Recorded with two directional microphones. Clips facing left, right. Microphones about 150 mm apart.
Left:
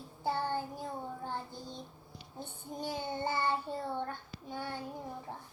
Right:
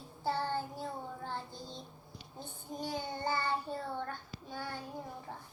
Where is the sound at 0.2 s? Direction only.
15° left (ahead or behind).